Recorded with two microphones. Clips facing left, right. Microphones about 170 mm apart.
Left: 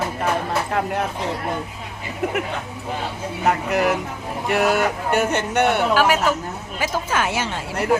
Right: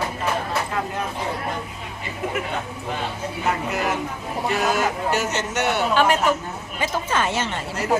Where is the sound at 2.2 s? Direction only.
70° left (ahead or behind).